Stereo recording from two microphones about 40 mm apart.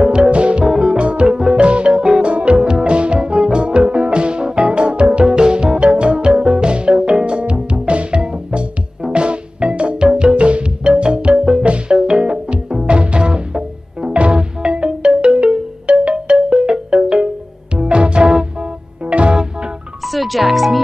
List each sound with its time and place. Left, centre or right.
0.0 s music: right
2.5 s music: centre
20.1 s music: centre